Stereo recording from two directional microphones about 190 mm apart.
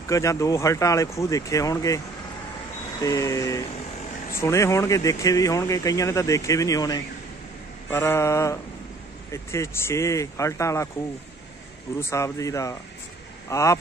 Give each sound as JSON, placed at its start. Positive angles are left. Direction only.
{"t": 0.1, "sound": "speech", "side_deg": 15}
{"t": 3.0, "sound": "speech", "side_deg": 20}
{"t": 12.0, "sound": "speech", "side_deg": 15}